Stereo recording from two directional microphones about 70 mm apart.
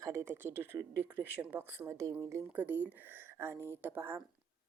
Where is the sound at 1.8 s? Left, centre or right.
Right.